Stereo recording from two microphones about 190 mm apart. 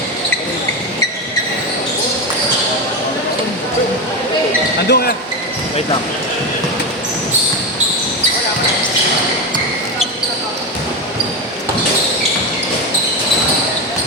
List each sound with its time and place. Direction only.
4.9 s speech: 55° left (ahead or behind)